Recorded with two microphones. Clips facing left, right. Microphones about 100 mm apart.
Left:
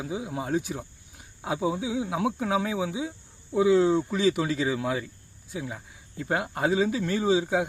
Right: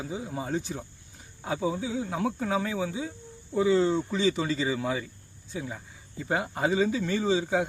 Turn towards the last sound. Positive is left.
turn(degrees=5)  # may be behind; listen again after turning